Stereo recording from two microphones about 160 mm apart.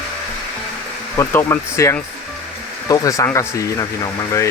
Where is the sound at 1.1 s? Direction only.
20° left (ahead or behind).